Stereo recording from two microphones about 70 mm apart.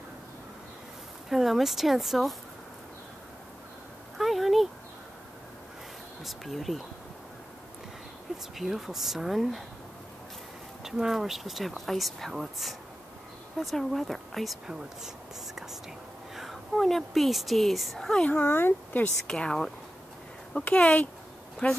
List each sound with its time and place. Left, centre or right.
1.3 s speech: centre
4.2 s a sound: centre
6.2 s speech: centre
8.5 s speech: centre
10.8 s speech: centre
16.3 s speech: centre
18.2 s speech: left
19.2 s speech: centre